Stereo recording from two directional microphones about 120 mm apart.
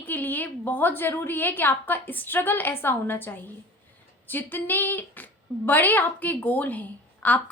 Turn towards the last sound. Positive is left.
turn(degrees=15)  # may be behind; listen again after turning